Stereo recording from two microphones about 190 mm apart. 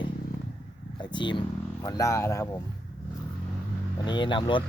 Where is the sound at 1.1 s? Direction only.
25° left (ahead or behind).